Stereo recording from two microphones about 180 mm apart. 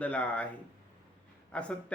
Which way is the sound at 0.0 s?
5° left (ahead or behind).